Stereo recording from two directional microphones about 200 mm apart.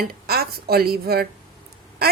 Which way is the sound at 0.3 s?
50° right (ahead or behind).